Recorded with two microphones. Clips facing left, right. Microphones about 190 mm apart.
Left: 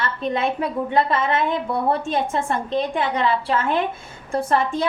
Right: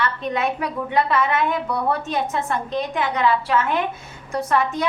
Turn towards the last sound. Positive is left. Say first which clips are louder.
# left 1 dB
turn(degrees=30)  # may be behind; listen again after turning